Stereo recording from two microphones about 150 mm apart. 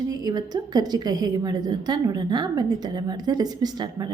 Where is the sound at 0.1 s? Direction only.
25° right (ahead or behind).